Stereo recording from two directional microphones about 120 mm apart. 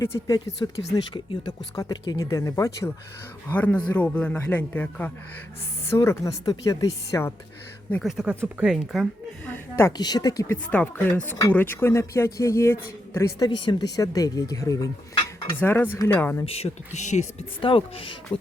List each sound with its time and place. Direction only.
0.3 s speech: 30° left (ahead or behind)
1.1 s speech: 45° left (ahead or behind); by 2.9 s 30° left (ahead or behind)
3.5 s a man's voice: 10° left (ahead or behind)
5.9 s speech: 25° left (ahead or behind)
8.0 s speech: 5° right (ahead or behind)
9.5 s a woman's voice: 20° left (ahead or behind)
10.0 s speech: 35° left (ahead or behind)
10.4 s a man's voice: 15° left (ahead or behind)
15.5 s a man's voice: 15° left (ahead or behind)
16.5 s speech: 60° left (ahead or behind)
17.6 s speech: 50° left (ahead or behind)